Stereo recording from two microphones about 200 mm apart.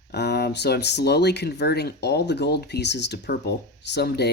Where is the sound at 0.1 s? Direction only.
55° left (ahead or behind).